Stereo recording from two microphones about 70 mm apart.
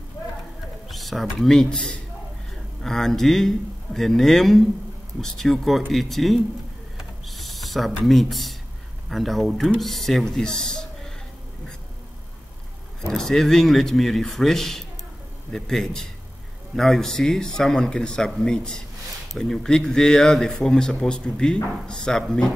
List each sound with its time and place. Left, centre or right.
0.8 s pigeon: centre
1.4 s speech: centre
7.0 s a sound: centre
9.1 s speech: centre
13.1 s speech: centre